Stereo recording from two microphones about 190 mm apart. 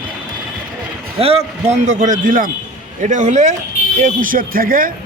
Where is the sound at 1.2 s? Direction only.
30° right (ahead or behind).